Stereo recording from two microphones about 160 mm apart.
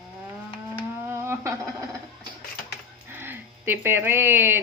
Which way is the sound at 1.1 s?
15° right (ahead or behind).